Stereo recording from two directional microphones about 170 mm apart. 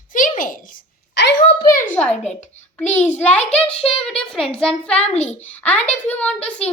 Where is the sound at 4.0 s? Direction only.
5° left (ahead or behind).